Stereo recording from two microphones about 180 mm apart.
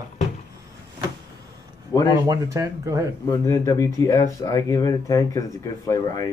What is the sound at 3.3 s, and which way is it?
Speech, 15° left (ahead or behind).